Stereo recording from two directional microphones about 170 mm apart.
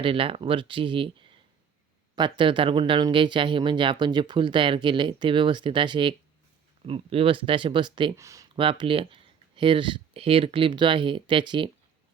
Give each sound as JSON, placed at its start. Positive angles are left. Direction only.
{"t": 0.0, "sound": "speech", "side_deg": -30}
{"t": 8.5, "sound": "speech", "side_deg": -30}